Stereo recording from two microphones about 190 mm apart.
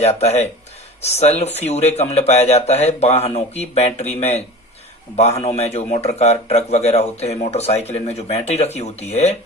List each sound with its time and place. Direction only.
0.0 s a man's voice: 35° left (ahead or behind)